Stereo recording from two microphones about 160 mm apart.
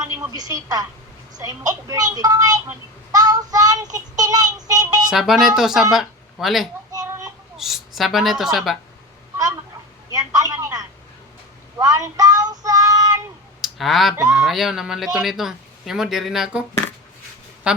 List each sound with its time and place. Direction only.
0.3 s a woman's voice: 20° right (ahead or behind)
4.2 s child singing: 20° right (ahead or behind)
5.1 s speech: centre (ahead or behind)
10.1 s a sound: 20° right (ahead or behind)
11.8 s child singing: 20° right (ahead or behind)
13.6 s speech: centre (ahead or behind)
17.7 s speech: 5° right (ahead or behind)